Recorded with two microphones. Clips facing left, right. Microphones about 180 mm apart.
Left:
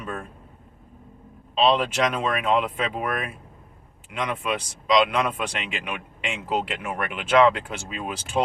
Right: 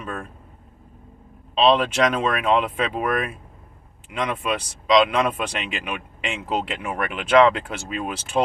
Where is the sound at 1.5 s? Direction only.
Centre (ahead or behind).